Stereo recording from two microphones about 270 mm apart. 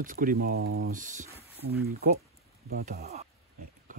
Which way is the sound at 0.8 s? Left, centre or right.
Right.